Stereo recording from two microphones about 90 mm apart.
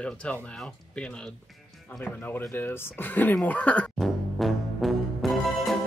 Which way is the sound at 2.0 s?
20° left (ahead or behind).